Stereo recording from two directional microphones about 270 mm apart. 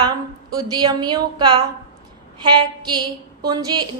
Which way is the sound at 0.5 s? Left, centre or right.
Centre.